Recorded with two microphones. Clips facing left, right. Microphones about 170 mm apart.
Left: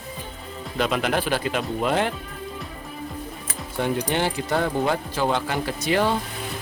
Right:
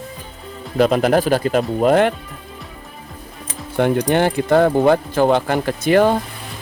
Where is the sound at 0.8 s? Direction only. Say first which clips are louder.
Right 9 dB; 40° right (ahead or behind).